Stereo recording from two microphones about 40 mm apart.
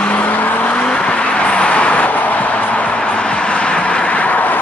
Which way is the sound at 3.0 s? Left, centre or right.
Left.